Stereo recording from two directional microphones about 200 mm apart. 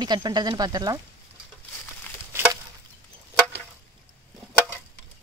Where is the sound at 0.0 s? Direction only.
20° right (ahead or behind).